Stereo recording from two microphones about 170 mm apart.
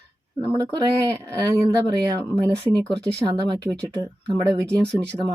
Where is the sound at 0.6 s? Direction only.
20° right (ahead or behind).